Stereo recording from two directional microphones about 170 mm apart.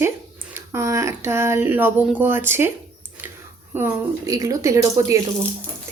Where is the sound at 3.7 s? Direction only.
10° right (ahead or behind).